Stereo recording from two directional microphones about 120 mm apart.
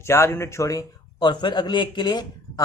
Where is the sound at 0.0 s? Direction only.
20° left (ahead or behind).